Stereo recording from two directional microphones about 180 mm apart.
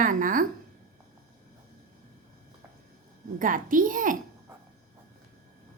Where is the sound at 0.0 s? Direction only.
50° right (ahead or behind).